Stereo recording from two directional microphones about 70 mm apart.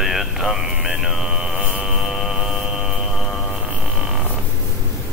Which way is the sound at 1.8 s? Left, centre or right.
Centre.